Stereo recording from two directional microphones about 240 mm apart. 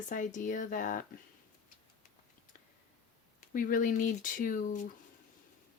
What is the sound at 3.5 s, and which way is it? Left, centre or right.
Speech, left.